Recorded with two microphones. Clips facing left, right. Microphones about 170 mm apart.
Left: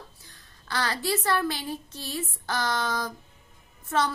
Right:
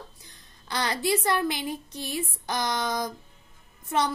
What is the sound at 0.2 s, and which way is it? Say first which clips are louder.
A woman's voice: right 1 dB; 20° right (ahead or behind).